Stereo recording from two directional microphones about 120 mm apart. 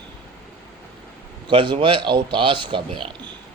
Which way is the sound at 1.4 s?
40° right (ahead or behind).